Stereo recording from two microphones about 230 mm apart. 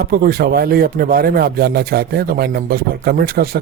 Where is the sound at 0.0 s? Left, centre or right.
Right.